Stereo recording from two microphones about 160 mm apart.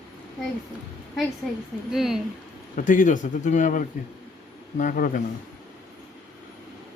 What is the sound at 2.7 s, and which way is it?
Speech, 55° left (ahead or behind).